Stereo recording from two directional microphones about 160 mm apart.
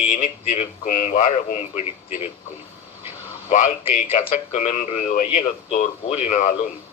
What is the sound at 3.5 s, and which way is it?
A man's voice, 55° left (ahead or behind).